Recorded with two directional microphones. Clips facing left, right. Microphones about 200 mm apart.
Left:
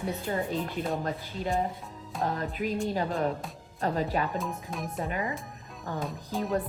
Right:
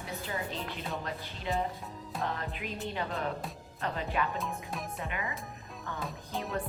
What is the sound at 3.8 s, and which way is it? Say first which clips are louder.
Speech: left 5 dB; 40° left (ahead or behind).